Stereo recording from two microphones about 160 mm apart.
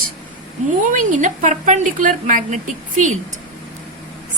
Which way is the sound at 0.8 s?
50° right (ahead or behind).